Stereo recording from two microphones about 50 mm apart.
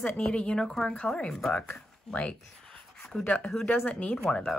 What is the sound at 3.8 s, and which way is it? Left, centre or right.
Speech, centre.